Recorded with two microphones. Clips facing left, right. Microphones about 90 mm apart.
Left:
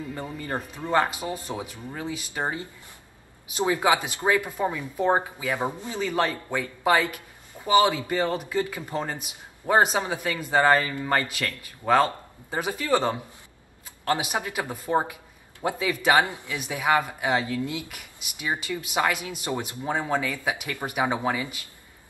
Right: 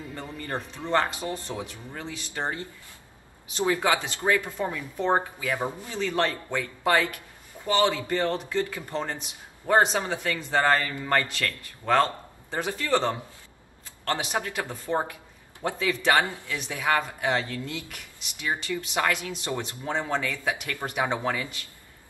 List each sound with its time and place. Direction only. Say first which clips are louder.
0.1 s speech: left 1 dB; 10° left (ahead or behind)